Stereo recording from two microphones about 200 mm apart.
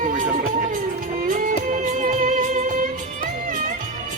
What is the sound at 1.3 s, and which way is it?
Music, 40° right (ahead or behind).